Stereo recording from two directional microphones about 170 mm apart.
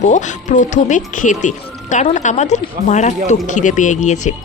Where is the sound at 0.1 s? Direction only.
45° left (ahead or behind).